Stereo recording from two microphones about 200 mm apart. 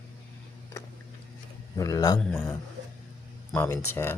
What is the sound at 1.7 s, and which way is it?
Speech, 20° left (ahead or behind).